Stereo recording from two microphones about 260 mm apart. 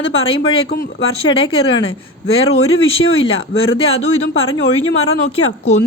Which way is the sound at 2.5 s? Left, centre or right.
Left.